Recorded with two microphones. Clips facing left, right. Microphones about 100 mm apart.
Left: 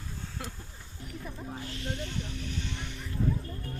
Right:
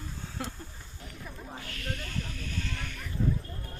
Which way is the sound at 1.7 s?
20° left (ahead or behind).